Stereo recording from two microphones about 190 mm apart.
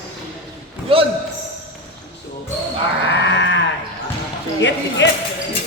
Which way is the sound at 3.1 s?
70° left (ahead or behind).